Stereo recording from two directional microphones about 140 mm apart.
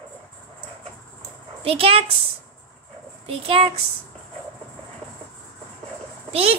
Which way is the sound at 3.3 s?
45° right (ahead or behind).